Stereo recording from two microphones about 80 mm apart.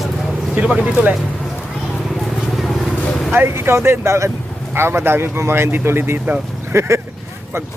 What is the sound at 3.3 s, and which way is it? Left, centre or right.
Speech, right.